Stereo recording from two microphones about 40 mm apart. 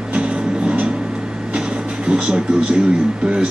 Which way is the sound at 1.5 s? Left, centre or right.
Right.